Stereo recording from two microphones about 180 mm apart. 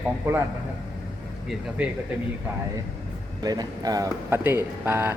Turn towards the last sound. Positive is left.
turn(degrees=-10)  # may be behind; listen again after turning